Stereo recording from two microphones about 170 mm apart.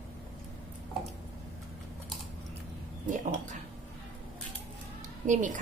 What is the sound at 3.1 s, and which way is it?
Speech, 45° right (ahead or behind).